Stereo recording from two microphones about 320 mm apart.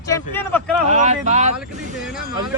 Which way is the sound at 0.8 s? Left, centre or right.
Right.